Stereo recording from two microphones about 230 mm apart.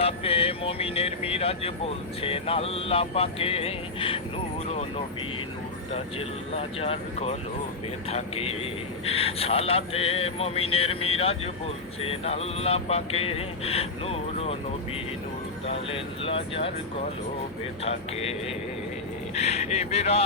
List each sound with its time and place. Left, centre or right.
0.0 s speech: left
5.9 s speech: left
15.6 s speech: left
17.8 s speech: left
19.4 s speech: left